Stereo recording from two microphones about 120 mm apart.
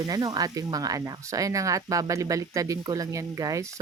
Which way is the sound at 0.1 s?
30° right (ahead or behind).